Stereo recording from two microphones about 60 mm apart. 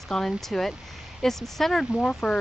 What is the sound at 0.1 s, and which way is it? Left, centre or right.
Speech, centre.